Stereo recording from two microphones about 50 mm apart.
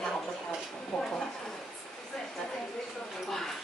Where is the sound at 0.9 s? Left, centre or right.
Centre.